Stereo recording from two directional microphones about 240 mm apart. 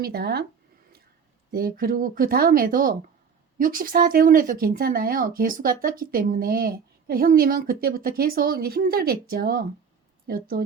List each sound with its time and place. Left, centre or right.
0.0 s speech: right
1.5 s speech: right